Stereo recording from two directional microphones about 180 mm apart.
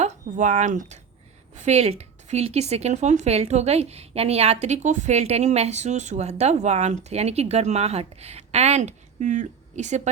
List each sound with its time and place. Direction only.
0.0 s a woman's voice: 40° right (ahead or behind)